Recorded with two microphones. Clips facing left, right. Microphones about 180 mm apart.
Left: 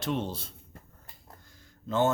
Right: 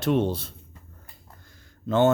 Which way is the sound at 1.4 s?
70° right (ahead or behind).